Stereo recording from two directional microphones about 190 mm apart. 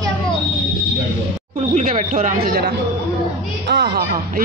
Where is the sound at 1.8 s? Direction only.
40° right (ahead or behind).